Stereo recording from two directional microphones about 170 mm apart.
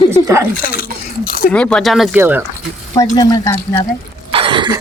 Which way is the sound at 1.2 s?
60° left (ahead or behind).